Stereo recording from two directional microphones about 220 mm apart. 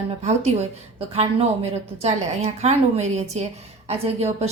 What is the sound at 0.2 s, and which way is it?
A woman's voice, 30° right (ahead or behind).